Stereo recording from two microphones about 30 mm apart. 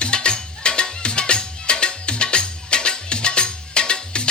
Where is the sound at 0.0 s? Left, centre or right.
Left.